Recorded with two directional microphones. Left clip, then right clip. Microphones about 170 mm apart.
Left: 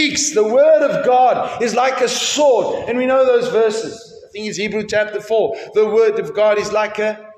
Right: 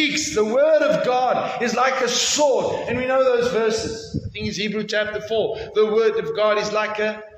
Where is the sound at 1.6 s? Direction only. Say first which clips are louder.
Left 4 dB; 45° left (ahead or behind).